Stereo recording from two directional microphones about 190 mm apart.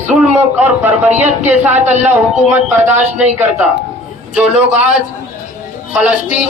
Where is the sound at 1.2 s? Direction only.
35° right (ahead or behind).